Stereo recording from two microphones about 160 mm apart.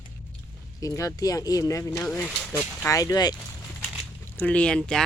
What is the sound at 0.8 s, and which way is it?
Speech, 20° left (ahead or behind).